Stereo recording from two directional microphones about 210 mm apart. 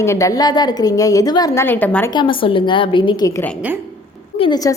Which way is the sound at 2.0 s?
20° left (ahead or behind).